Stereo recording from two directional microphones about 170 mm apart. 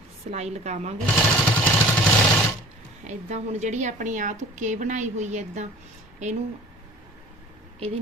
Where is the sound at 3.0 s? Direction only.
40° right (ahead or behind).